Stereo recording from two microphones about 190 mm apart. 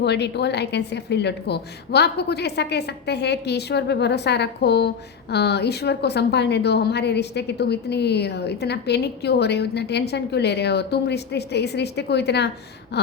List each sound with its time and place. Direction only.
0.0 s a woman's voice: 60° left (ahead or behind)